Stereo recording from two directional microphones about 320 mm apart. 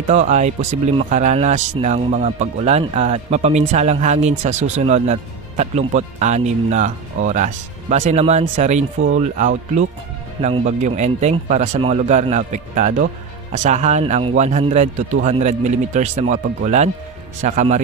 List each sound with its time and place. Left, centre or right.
0.0 s speech: right